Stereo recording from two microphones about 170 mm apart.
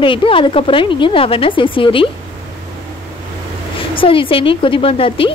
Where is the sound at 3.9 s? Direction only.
30° left (ahead or behind).